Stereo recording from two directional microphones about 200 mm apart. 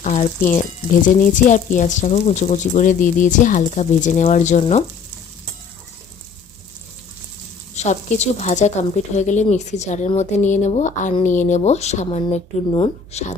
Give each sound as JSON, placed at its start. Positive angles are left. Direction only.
{"t": 0.0, "sound": "a woman's voice", "side_deg": 35}
{"t": 7.8, "sound": "a woman's voice", "side_deg": 35}